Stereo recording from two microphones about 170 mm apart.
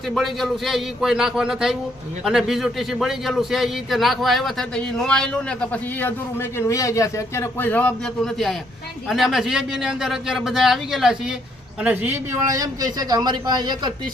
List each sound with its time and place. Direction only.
0.1 s a man's voice: centre (ahead or behind); by 13.9 s 25° right (ahead or behind)